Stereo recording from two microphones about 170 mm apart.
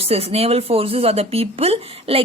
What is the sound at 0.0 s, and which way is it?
Speech, 35° right (ahead or behind).